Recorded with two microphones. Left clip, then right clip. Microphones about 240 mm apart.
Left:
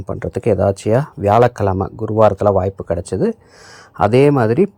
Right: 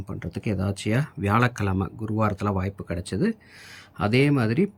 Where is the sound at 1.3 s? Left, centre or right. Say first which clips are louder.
Left 12 dB; centre.